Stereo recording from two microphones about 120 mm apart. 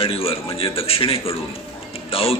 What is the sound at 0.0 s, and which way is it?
A man's voice, 50° left (ahead or behind).